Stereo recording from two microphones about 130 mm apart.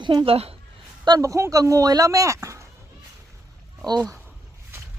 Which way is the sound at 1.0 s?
30° right (ahead or behind).